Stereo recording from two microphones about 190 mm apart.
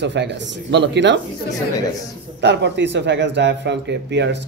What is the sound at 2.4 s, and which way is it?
Speech, 65° right (ahead or behind).